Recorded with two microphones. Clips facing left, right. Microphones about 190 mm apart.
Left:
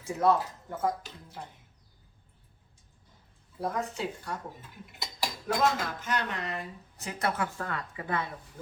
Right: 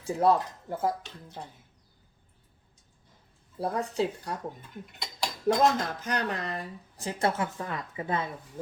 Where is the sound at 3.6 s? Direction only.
35° right (ahead or behind).